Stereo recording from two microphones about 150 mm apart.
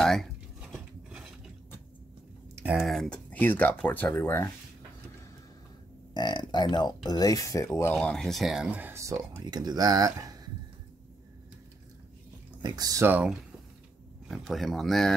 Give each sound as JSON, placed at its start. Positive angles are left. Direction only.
{"t": 0.0, "sound": "a sound", "side_deg": 0}
{"t": 2.5, "sound": "typing", "side_deg": -10}
{"t": 2.9, "sound": "speech", "side_deg": 5}
{"t": 6.1, "sound": "speech", "side_deg": 30}
{"t": 7.9, "sound": "speech", "side_deg": 5}
{"t": 12.6, "sound": "speech", "side_deg": -25}
{"t": 14.3, "sound": "speech", "side_deg": 0}